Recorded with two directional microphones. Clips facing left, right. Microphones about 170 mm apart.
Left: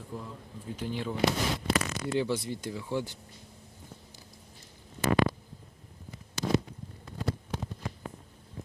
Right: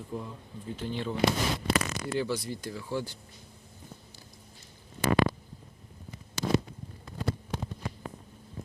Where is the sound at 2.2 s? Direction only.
25° left (ahead or behind).